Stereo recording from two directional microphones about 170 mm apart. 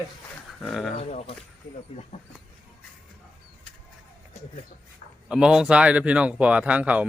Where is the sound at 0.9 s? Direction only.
40° left (ahead or behind).